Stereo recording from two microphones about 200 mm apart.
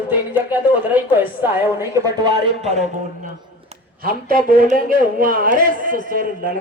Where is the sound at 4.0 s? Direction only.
45° right (ahead or behind).